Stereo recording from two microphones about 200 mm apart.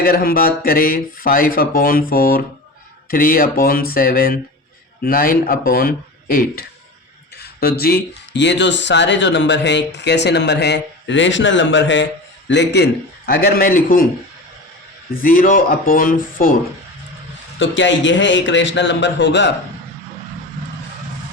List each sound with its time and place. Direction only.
0.0 s speech: 45° left (ahead or behind)
8.4 s speech: 60° left (ahead or behind); by 14.1 s 45° left (ahead or behind)
15.1 s speech: 45° left (ahead or behind)
17.6 s speech: 65° left (ahead or behind)